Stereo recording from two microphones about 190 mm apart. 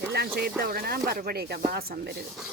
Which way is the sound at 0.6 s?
50° right (ahead or behind).